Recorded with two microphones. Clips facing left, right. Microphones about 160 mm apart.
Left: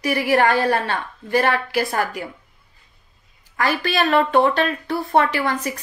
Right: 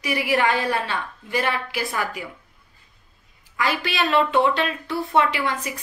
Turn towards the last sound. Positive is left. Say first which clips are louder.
# left 3 dB
turn(degrees=45)  # may be behind; listen again after turning